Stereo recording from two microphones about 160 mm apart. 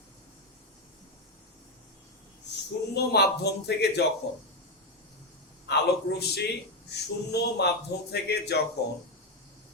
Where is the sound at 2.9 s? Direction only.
90° left.